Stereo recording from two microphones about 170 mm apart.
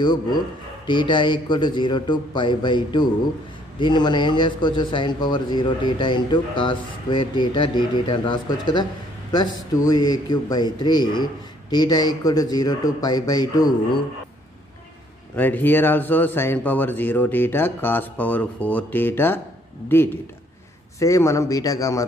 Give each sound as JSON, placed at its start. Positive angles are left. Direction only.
{"t": 0.0, "sound": "a man's voice", "side_deg": 25}
{"t": 9.8, "sound": "a man's voice", "side_deg": 25}
{"t": 15.3, "sound": "a man's voice", "side_deg": 10}
{"t": 21.0, "sound": "a man's voice", "side_deg": 20}